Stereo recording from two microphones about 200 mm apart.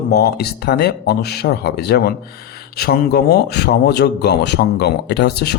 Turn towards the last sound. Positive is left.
turn(degrees=55)  # may be behind; listen again after turning